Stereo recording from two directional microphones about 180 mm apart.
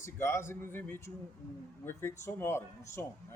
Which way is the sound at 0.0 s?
15° left (ahead or behind).